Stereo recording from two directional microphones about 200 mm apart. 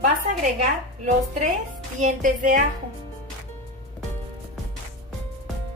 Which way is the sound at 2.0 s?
40° right (ahead or behind).